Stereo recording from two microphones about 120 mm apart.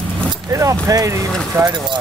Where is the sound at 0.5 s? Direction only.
30° right (ahead or behind).